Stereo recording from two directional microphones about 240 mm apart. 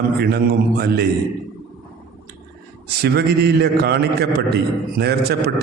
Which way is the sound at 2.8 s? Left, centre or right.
Right.